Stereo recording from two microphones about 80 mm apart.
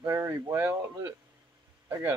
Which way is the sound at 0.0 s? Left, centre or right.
Right.